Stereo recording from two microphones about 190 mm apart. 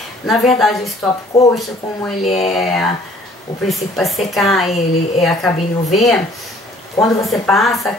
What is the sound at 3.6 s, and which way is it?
Speech, centre (ahead or behind).